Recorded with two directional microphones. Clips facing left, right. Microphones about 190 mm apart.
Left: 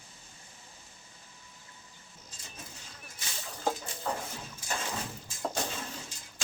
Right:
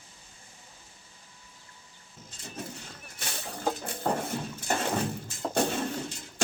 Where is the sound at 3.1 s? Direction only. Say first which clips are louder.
Right 6 dB; 65° right (ahead or behind).